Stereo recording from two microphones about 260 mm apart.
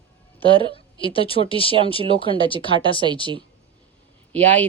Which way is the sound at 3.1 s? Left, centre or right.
Centre.